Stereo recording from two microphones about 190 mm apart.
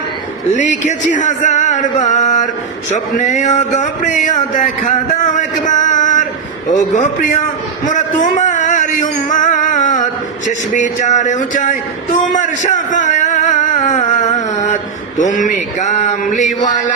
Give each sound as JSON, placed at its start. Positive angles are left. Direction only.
{"t": 0.5, "sound": "speech", "side_deg": 40}
{"t": 5.2, "sound": "a sound", "side_deg": 40}
{"t": 6.7, "sound": "speech", "side_deg": 40}
{"t": 7.9, "sound": "music", "side_deg": 40}
{"t": 12.2, "sound": "a sound", "side_deg": 40}
{"t": 15.2, "sound": "speech", "side_deg": 40}